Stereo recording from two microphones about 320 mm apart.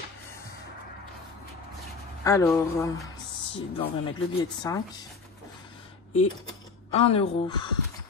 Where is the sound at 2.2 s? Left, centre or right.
Centre.